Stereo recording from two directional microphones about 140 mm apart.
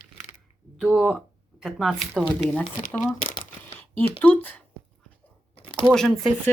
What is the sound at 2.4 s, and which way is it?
Speech, 10° left (ahead or behind).